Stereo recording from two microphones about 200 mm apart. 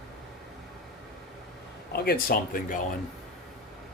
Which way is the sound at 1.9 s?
50° left (ahead or behind).